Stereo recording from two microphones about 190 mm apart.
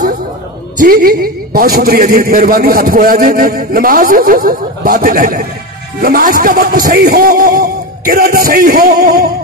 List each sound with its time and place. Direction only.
0.7 s a man's voice: 50° right (ahead or behind)